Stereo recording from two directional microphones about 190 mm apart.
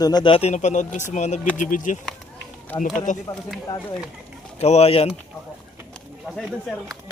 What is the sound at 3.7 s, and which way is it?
Speech, 20° left (ahead or behind).